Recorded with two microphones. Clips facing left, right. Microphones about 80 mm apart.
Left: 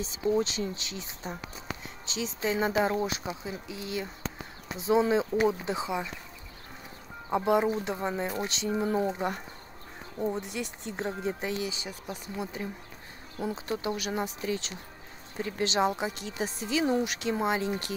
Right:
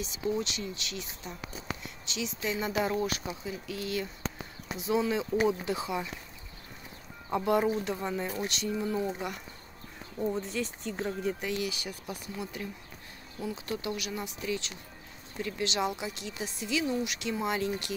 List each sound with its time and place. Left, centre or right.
0.0 s speech: left
7.2 s speech: centre
10.1 s speech: centre
13.7 s speech: left